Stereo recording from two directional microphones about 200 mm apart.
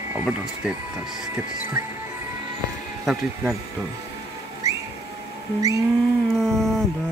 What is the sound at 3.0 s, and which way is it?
Speech, centre (ahead or behind).